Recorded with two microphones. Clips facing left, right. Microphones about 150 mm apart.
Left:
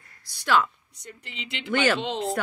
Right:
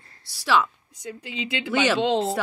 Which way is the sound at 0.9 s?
90° right.